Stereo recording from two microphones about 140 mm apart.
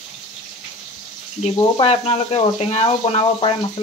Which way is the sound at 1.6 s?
45° left (ahead or behind).